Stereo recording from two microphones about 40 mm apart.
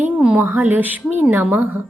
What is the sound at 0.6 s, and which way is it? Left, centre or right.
Speech, right.